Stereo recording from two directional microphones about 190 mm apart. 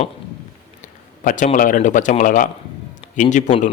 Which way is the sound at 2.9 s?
40° left (ahead or behind).